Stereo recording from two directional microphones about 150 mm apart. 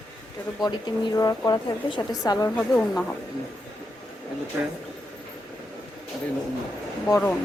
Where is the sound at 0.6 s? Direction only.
30° left (ahead or behind).